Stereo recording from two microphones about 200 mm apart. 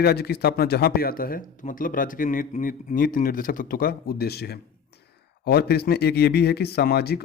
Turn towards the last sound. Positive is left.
turn(degrees=55)  # may be behind; listen again after turning